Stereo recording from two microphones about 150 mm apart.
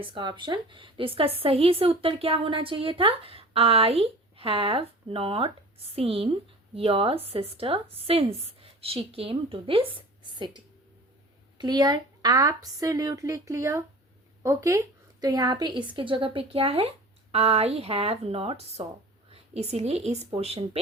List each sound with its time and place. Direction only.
0.1 s a woman's voice: 30° right (ahead or behind)